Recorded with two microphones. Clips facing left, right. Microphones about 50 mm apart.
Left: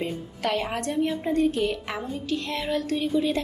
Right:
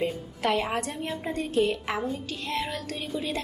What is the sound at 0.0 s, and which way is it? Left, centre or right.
A woman's voice, centre.